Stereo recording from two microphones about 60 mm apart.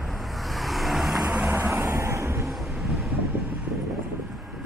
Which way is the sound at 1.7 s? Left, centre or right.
Right.